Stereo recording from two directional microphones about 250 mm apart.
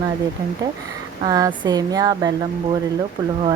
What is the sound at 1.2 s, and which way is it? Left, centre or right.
Speech, centre.